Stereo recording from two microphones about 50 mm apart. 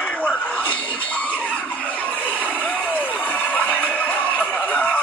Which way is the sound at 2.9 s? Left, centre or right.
Left.